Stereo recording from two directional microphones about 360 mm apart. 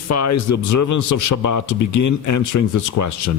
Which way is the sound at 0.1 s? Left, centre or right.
Left.